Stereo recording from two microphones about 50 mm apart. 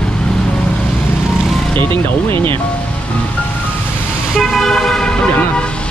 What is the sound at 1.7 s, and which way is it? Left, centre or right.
Speech, left.